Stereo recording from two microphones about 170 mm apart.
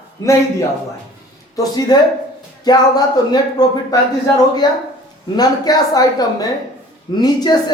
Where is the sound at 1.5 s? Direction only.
20° left (ahead or behind).